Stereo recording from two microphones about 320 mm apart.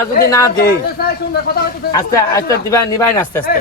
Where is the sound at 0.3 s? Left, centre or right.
Centre.